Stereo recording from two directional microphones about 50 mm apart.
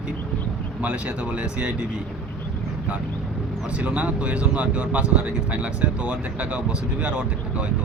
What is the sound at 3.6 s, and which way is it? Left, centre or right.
Speech, right.